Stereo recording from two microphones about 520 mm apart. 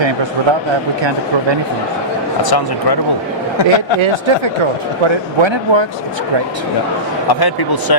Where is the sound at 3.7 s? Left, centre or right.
Right.